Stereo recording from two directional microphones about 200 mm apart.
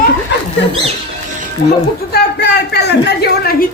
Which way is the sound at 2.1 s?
55° left (ahead or behind).